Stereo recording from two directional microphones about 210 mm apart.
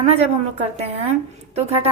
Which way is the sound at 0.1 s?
30° right (ahead or behind).